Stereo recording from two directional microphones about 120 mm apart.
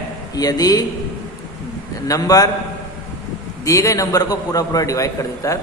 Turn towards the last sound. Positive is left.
turn(degrees=25)  # may be behind; listen again after turning